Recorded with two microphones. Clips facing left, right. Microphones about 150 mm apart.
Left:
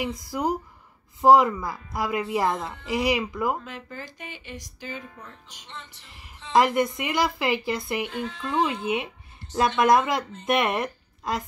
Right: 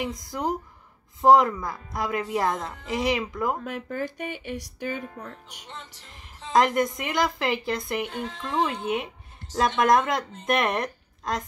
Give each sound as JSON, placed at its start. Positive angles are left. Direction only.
{"t": 0.0, "sound": "a woman's voice", "side_deg": 5}
{"t": 3.6, "sound": "speech", "side_deg": -60}
{"t": 6.0, "sound": "a woman's voice", "side_deg": 5}
{"t": 8.1, "sound": "speech", "side_deg": -40}
{"t": 8.8, "sound": "a woman's voice", "side_deg": 5}